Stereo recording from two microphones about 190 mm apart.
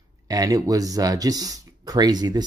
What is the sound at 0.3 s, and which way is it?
Speech, 20° right (ahead or behind).